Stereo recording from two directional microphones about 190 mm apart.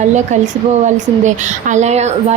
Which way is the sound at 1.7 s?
35° right (ahead or behind).